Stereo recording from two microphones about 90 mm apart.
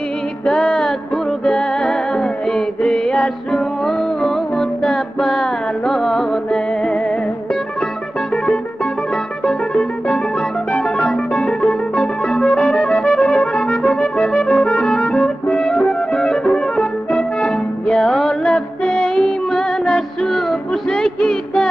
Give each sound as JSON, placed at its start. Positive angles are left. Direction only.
{"t": 0.5, "sound": "music", "side_deg": 5}
{"t": 9.1, "sound": "music", "side_deg": 5}